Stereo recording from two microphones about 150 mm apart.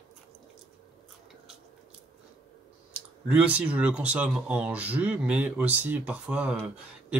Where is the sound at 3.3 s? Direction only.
10° right (ahead or behind).